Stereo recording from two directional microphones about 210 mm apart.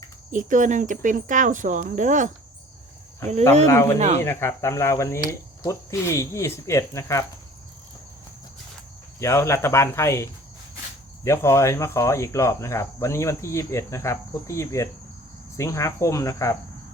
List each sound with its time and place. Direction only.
0.3 s speech: 40° right (ahead or behind)
3.7 s speech: 15° left (ahead or behind)
3.9 s speech: 35° right (ahead or behind)
4.2 s speech: 10° left (ahead or behind)
9.1 s speech: 15° left (ahead or behind)